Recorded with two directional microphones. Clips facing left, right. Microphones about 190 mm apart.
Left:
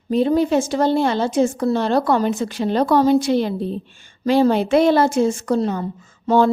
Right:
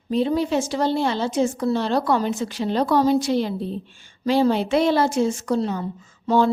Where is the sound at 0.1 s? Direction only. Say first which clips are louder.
Left 4 dB; 50° left (ahead or behind).